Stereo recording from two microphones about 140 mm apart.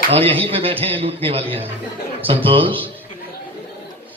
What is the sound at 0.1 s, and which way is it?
A man's voice, 45° right (ahead or behind).